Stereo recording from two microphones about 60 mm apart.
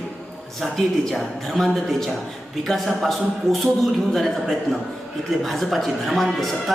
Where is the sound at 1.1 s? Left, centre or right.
Centre.